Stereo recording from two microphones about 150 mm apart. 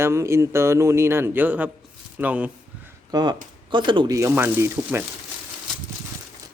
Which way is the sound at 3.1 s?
30° right (ahead or behind).